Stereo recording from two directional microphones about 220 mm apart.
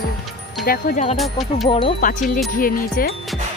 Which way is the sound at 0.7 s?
40° left (ahead or behind).